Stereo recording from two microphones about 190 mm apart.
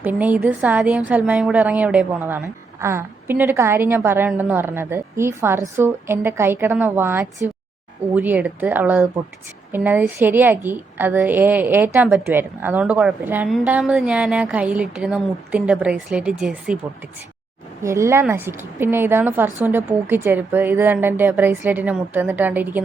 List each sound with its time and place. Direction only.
0.0 s a woman's voice: 10° right (ahead or behind)
17.8 s a woman's voice: 15° right (ahead or behind)